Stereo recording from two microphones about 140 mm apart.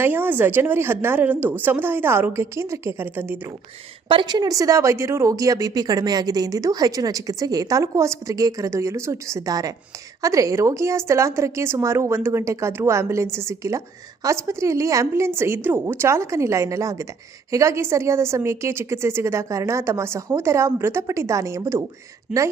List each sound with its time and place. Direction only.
0.0 s speech: 15° right (ahead or behind)
4.1 s a woman's voice: 30° right (ahead or behind)
22.3 s a woman's voice: 5° right (ahead or behind)